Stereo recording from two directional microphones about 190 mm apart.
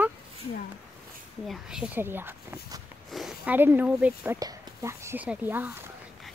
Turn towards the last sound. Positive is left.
turn(degrees=-10)  # may be behind; listen again after turning